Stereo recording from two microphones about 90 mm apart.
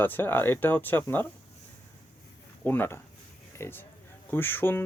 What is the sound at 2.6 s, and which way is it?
Speech, 20° left (ahead or behind).